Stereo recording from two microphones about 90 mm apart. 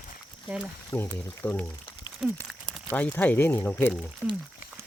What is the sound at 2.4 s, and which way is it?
Crumpling, centre (ahead or behind).